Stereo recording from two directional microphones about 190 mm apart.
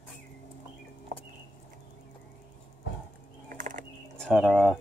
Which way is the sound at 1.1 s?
40° right (ahead or behind).